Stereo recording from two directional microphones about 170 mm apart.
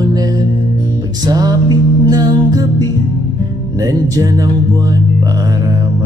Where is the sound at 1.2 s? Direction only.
20° right (ahead or behind).